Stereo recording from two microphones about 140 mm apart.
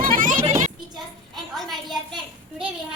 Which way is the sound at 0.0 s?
80° right.